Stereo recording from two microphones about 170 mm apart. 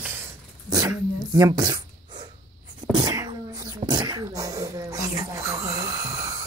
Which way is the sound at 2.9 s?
25° right (ahead or behind).